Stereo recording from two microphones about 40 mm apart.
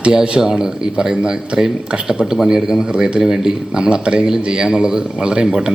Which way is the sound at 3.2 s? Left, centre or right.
Centre.